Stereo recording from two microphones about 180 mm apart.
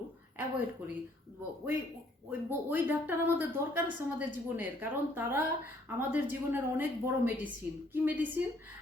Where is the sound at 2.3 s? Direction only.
10° right (ahead or behind).